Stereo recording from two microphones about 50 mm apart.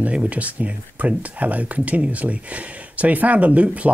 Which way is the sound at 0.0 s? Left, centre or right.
Right.